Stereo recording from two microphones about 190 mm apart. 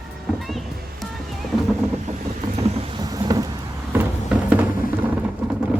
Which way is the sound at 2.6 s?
30° right (ahead or behind).